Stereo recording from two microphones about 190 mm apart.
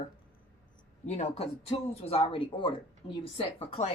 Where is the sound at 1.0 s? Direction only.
35° left (ahead or behind).